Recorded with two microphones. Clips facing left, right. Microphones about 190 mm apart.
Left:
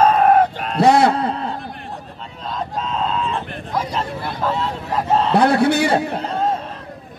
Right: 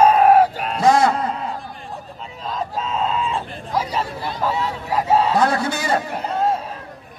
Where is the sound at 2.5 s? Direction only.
5° right (ahead or behind).